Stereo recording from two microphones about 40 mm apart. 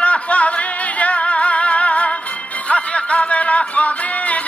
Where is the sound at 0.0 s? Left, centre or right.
Left.